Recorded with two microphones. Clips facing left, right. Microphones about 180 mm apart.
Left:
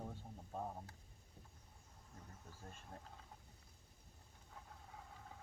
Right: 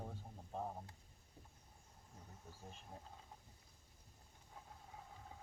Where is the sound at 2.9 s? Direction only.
10° right (ahead or behind).